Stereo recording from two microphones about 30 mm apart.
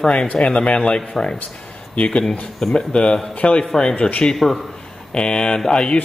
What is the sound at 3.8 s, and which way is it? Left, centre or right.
Speech, left.